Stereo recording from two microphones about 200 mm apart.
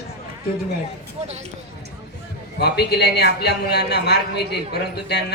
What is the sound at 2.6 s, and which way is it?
A man's voice, 55° left (ahead or behind).